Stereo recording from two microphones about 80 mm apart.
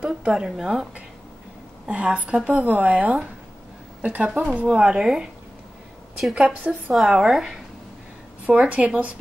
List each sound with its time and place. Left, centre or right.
0.0 s a woman's voice: centre
1.9 s a woman's voice: centre
6.3 s a woman's voice: centre
6.9 s a woman's voice: centre